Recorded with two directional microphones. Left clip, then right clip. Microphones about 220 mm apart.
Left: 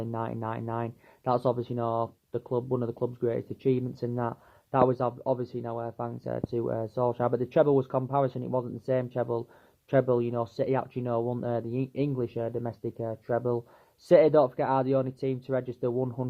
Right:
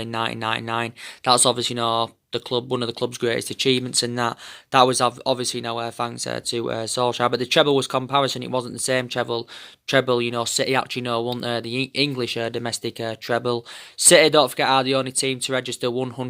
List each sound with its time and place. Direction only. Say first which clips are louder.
0.0 s speech: right 9 dB; 10° right (ahead or behind)
1.3 s speech: right 9 dB; 30° right (ahead or behind)
1.6 s speech: right 8 dB; 10° right (ahead or behind)
2.3 s speech: right 5 dB; 30° right (ahead or behind)
7.2 s speech: right 6 dB; 15° right (ahead or behind)
9.2 s speech: right 5 dB; 30° right (ahead or behind)
9.9 s speech: right 6 dB; 10° right (ahead or behind)
12.2 s speech: right 7 dB; 20° right (ahead or behind)
14.1 s speech: right 5 dB; 10° right (ahead or behind)